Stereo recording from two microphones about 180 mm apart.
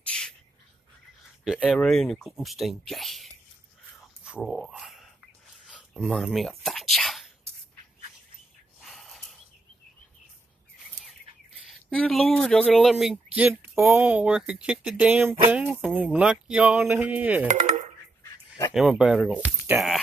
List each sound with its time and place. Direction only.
0.1 s a sound: 5° left (ahead or behind)
1.4 s speech: 5° right (ahead or behind)
5.7 s a sound: 5° right (ahead or behind)
8.8 s snort: centre (ahead or behind)
11.6 s speech: 5° left (ahead or behind)
17.5 s speech: 40° right (ahead or behind)
18.7 s speech: 5° right (ahead or behind)